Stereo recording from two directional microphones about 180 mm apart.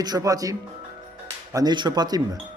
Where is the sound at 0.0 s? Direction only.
20° right (ahead or behind).